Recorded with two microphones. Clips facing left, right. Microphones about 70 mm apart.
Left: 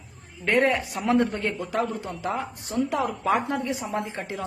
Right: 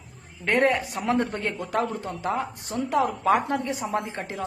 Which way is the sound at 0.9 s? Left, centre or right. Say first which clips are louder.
Left 2 dB; right.